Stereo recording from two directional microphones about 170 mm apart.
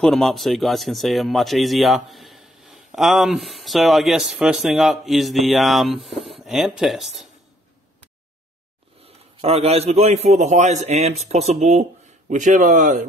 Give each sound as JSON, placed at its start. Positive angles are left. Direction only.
{"t": 0.0, "sound": "speech", "side_deg": 0}
{"t": 9.0, "sound": "a man's voice", "side_deg": -35}